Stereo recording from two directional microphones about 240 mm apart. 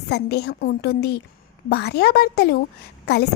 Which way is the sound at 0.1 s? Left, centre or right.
Left.